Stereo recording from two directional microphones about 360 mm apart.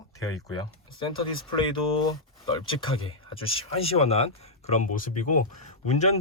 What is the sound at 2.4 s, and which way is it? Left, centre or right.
Speech, centre.